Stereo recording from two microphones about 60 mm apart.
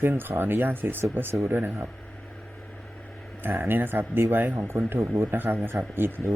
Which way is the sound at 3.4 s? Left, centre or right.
Right.